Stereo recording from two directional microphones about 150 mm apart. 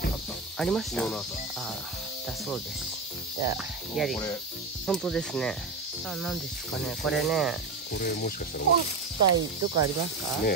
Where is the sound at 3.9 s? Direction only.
Centre (ahead or behind).